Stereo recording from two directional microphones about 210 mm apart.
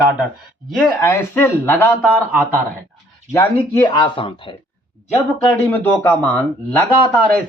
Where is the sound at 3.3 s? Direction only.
15° left (ahead or behind).